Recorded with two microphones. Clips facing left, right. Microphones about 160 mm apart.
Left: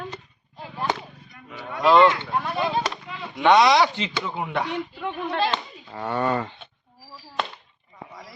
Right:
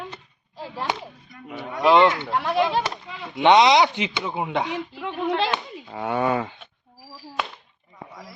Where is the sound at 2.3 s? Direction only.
90° right.